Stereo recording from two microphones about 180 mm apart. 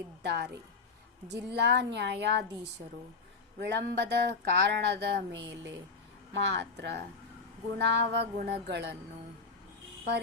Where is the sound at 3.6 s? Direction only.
70° right (ahead or behind).